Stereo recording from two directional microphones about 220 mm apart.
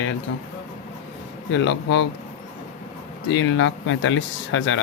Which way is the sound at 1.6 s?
55° left (ahead or behind).